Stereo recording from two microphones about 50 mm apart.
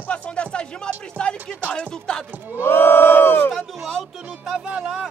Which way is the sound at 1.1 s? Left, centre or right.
Centre.